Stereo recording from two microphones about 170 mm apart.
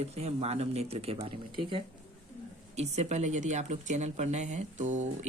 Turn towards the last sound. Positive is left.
turn(degrees=-45)  # may be behind; listen again after turning